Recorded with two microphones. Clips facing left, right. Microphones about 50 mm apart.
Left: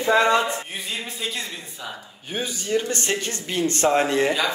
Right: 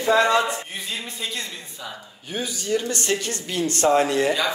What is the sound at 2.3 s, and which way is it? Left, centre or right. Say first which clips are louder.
Speech: even; left.